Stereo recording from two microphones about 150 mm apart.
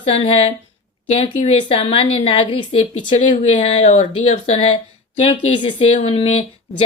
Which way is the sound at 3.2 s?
55° left (ahead or behind).